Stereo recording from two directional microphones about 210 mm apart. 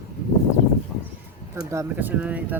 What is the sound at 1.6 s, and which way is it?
Speech, 10° right (ahead or behind).